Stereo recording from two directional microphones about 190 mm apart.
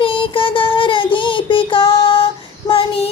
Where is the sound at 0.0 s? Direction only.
25° left (ahead or behind).